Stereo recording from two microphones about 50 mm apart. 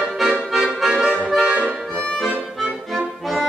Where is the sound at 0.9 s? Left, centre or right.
Centre.